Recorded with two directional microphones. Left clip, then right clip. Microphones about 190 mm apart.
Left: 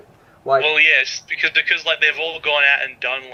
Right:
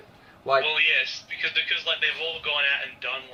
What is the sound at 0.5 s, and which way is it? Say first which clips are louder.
A man's voice: left 8 dB; 35° left (ahead or behind).